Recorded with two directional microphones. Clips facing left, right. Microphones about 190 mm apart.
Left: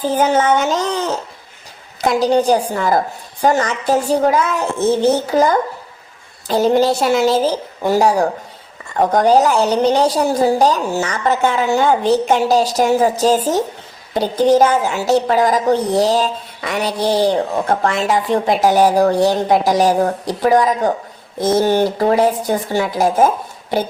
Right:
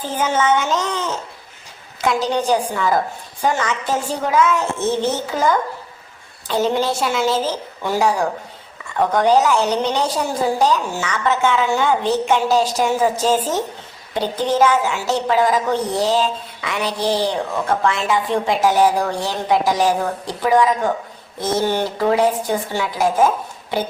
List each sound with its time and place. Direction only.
0.2 s a woman's voice: 35° left (ahead or behind)
2.2 s a woman's voice: 40° left (ahead or behind)